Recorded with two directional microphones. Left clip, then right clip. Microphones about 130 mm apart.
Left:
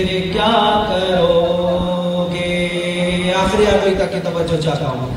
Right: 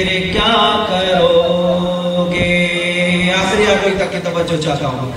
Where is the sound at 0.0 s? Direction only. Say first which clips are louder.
Right 2 dB; 40° left (ahead or behind).